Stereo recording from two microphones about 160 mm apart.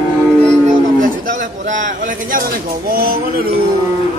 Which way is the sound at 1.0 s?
60° right (ahead or behind).